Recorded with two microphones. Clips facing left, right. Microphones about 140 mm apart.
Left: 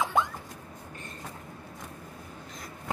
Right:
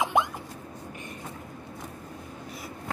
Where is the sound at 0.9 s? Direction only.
15° right (ahead or behind).